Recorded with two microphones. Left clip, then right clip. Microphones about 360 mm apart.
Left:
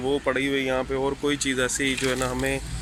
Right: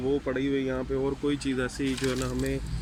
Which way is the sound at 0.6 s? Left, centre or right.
Left.